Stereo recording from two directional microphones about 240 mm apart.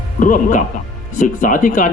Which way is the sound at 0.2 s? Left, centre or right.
Left.